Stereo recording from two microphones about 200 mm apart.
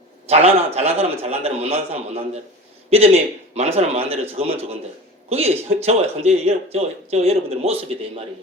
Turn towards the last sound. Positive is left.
turn(degrees=-30)  # may be behind; listen again after turning